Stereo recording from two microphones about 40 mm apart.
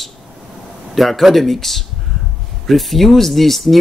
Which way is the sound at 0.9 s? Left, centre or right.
Centre.